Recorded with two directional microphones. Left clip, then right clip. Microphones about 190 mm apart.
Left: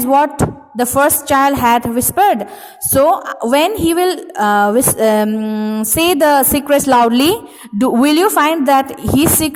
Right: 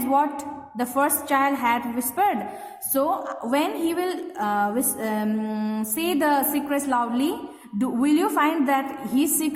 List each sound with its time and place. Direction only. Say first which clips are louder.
0.1 s a woman's voice: left 10 dB; 40° left (ahead or behind)
6.0 s a woman's voice: left 11 dB; 45° left (ahead or behind)